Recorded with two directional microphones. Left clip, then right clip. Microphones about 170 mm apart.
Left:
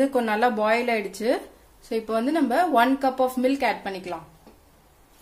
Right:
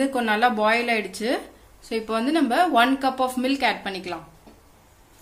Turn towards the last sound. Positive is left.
turn(degrees=20)  # may be behind; listen again after turning